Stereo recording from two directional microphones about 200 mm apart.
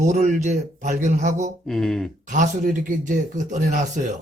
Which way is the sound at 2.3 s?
40° right (ahead or behind).